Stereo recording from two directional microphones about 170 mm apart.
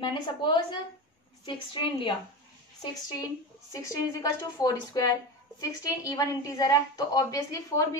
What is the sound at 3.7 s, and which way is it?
A woman's voice, 20° left (ahead or behind).